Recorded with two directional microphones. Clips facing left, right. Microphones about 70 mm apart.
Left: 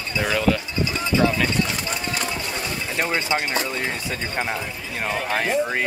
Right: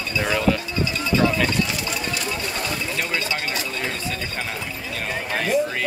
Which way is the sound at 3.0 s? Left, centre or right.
Left.